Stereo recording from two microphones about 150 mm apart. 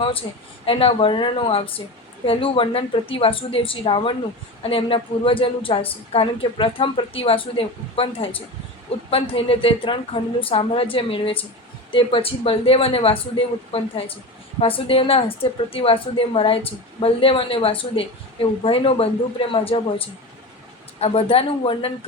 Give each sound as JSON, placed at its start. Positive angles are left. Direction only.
{"t": 0.0, "sound": "a woman's voice", "side_deg": 35}
{"t": 21.0, "sound": "a woman's voice", "side_deg": 40}